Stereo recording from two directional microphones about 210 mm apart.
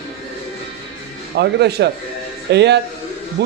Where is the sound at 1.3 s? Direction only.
55° right (ahead or behind).